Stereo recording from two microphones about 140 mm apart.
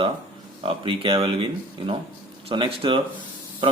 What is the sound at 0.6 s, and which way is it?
A man's voice, 40° right (ahead or behind).